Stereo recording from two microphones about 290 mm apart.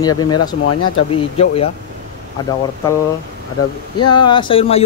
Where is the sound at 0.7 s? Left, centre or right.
Left.